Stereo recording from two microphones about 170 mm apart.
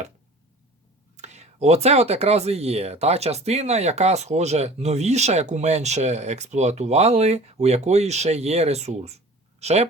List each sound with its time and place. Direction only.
1.1 s speech: 40° right (ahead or behind)